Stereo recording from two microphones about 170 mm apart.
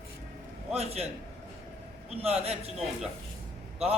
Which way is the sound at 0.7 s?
35° right (ahead or behind).